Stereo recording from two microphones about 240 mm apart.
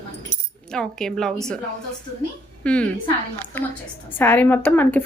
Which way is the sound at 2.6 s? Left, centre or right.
Centre.